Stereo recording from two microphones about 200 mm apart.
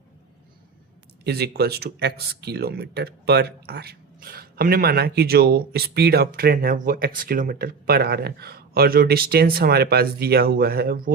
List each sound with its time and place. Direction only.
1.2 s speech: 55° right (ahead or behind)